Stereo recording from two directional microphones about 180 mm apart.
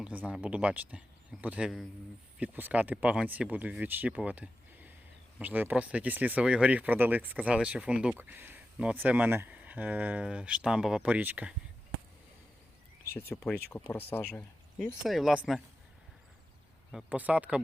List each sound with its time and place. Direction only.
0.0 s speech: 5° right (ahead or behind)
13.3 s speech: 10° left (ahead or behind)
16.9 s speech: 10° right (ahead or behind)